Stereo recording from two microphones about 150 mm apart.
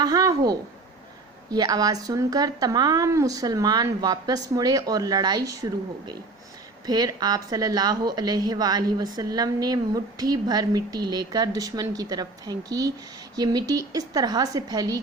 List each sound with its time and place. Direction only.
0.0 s a woman's voice: 25° right (ahead or behind)
6.8 s a woman's voice: 25° right (ahead or behind)